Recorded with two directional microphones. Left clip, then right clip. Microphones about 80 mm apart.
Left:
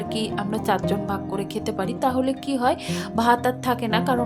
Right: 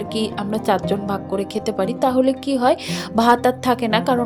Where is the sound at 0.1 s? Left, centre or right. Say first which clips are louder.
Right 3 dB; right.